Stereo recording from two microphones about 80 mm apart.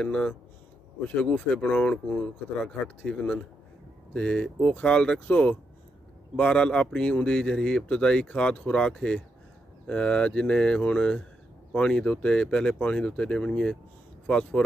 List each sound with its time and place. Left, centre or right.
0.0 s speech: centre